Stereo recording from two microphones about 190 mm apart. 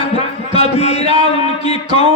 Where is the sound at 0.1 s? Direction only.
30° left (ahead or behind).